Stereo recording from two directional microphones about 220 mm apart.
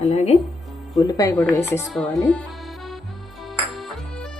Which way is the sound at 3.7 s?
Centre (ahead or behind).